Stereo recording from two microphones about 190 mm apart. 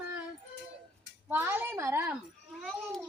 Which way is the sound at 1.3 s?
10° right (ahead or behind).